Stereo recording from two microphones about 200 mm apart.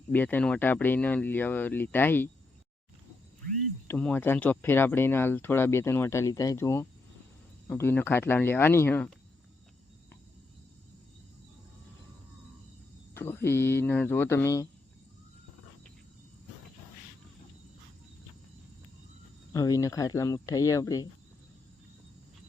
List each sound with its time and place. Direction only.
0.1 s speech: 10° left (ahead or behind)
3.8 s speech: 5° left (ahead or behind)
13.1 s speech: 10° left (ahead or behind)
19.5 s speech: 15° left (ahead or behind)